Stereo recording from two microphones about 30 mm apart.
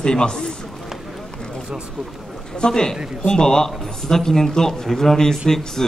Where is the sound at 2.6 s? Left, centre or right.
Left.